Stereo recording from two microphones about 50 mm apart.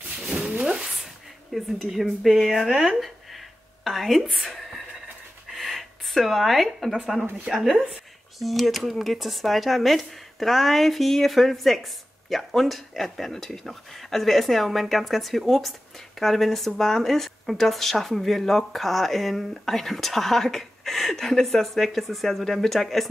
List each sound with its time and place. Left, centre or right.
0.2 s a sound: centre
1.5 s speech: centre
3.0 s a sound: centre
7.0 s speech: centre
7.5 s speech: centre
8.4 s speech: centre